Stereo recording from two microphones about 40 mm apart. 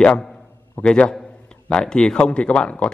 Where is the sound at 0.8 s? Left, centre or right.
Left.